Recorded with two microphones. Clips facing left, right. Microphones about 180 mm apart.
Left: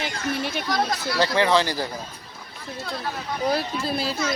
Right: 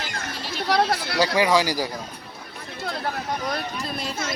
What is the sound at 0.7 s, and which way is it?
Speech, 70° right (ahead or behind).